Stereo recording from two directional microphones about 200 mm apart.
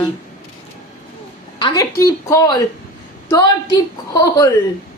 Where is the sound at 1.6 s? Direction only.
20° left (ahead or behind).